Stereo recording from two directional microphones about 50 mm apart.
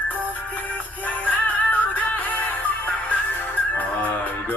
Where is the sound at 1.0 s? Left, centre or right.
Left.